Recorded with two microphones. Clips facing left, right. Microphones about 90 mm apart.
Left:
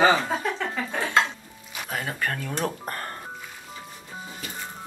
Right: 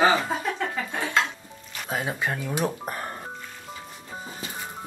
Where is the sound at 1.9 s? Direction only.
15° right (ahead or behind).